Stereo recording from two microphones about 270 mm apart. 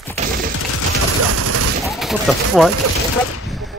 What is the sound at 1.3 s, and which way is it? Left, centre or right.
Fusillade, right.